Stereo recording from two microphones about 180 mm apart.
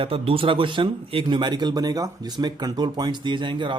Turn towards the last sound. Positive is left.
turn(degrees=-25)  # may be behind; listen again after turning